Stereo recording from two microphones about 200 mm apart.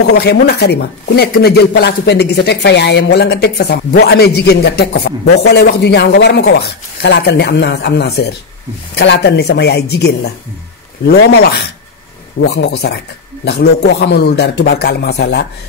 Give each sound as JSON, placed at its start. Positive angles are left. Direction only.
{"t": 0.2, "sound": "speech", "side_deg": 55}